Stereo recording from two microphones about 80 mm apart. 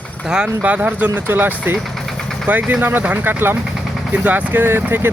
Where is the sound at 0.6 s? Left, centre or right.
Centre.